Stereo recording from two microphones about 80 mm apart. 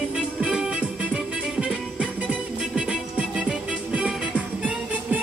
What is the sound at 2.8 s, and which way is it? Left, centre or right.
Music, centre.